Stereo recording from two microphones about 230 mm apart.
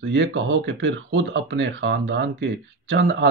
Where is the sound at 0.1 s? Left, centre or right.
Right.